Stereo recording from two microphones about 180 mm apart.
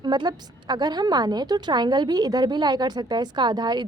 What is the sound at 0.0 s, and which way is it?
A woman's voice, 25° right (ahead or behind).